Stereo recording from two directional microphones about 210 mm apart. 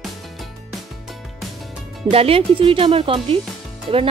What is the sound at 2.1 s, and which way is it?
Speech, 25° right (ahead or behind).